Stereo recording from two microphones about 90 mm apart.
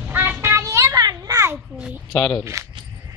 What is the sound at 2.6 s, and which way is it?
Speech, 35° right (ahead or behind).